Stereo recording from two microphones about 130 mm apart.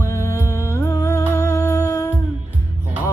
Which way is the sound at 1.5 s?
25° left (ahead or behind).